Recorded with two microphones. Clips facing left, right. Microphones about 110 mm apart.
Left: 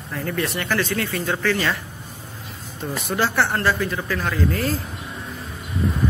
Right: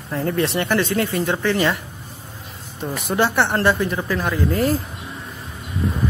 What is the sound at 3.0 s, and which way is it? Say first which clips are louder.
Speech: right 3 dB; 25° right (ahead or behind).